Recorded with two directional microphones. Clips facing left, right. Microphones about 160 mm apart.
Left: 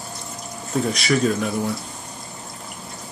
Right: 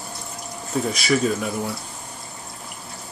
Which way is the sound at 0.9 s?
Centre (ahead or behind).